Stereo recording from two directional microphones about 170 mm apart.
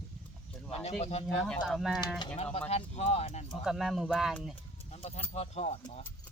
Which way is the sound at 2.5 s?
40° left (ahead or behind).